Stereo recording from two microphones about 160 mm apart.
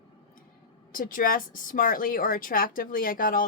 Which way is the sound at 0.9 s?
60° left (ahead or behind).